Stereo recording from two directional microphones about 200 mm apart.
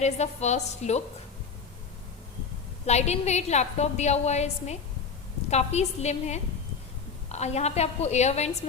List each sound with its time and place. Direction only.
0.0 s a woman's voice: 35° left (ahead or behind)
2.8 s a woman's voice: 35° left (ahead or behind)